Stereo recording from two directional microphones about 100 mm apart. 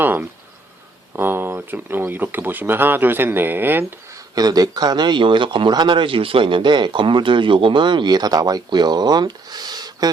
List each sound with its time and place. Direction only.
0.0 s cricket: 20° right (ahead or behind)
1.1 s speech: 20° right (ahead or behind)
4.4 s speech: 40° right (ahead or behind)